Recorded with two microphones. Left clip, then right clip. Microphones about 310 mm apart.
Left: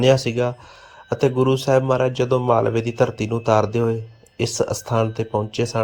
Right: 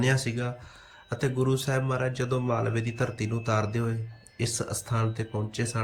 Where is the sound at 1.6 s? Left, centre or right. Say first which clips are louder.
Left 12 dB; left.